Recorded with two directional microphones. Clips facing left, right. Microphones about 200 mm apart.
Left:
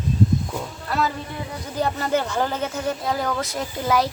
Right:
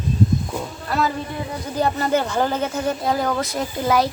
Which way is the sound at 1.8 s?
45° right (ahead or behind).